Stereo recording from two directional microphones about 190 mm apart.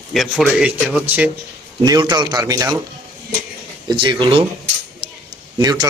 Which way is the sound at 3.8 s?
25° right (ahead or behind).